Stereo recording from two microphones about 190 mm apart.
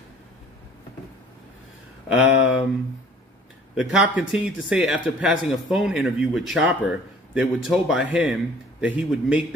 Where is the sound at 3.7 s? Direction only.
5° right (ahead or behind).